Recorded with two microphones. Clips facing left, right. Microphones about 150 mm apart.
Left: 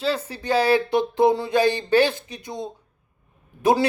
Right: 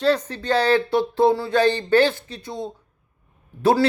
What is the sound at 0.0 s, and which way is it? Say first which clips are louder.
Speech: right 5 dB; 5° left (ahead or behind).